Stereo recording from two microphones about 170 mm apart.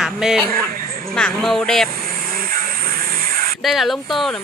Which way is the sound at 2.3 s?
60° right (ahead or behind).